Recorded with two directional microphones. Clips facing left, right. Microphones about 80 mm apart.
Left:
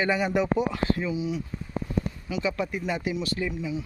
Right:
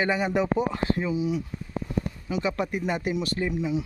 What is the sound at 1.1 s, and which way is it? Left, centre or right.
Speech, right.